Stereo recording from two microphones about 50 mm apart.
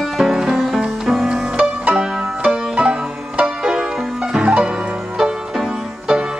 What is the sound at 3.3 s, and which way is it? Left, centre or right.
Music, right.